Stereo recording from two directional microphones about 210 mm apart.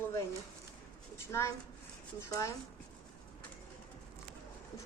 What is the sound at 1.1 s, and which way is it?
A woman's voice, 15° left (ahead or behind).